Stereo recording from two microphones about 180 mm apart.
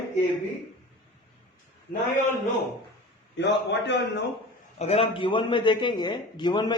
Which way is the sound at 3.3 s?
75° left (ahead or behind).